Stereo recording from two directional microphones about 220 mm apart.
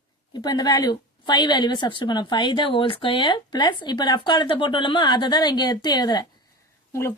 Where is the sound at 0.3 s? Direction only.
20° left (ahead or behind).